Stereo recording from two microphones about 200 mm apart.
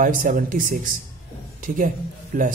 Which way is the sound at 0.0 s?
45° right (ahead or behind).